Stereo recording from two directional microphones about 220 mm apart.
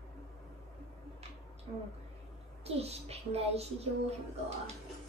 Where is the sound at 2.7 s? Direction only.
30° right (ahead or behind).